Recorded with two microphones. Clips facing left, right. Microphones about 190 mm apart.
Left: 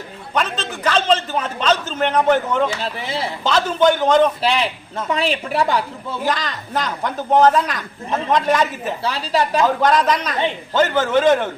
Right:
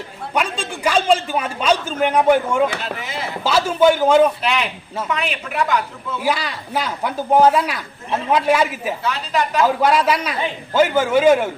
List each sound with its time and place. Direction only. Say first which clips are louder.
0.3 s a man's voice: even; 10° right (ahead or behind)
3.0 s a woman's voice: left 3 dB; 30° left (ahead or behind)
3.4 s speech: right 1 dB; 10° right (ahead or behind)
4.4 s a woman's voice: left 2 dB; 30° left (ahead or behind)
6.2 s speech: right 1 dB; 10° right (ahead or behind)
9.0 s a woman's voice: left 3 dB; 30° left (ahead or behind)
9.6 s speech: even; 10° right (ahead or behind)